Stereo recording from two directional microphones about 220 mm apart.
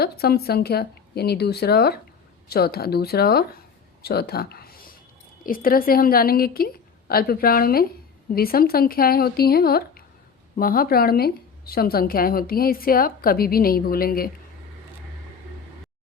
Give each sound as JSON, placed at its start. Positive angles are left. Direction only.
{"t": 0.0, "sound": "a woman's voice", "side_deg": 45}
{"t": 4.0, "sound": "a sound", "side_deg": 45}
{"t": 5.4, "sound": "a woman's voice", "side_deg": 40}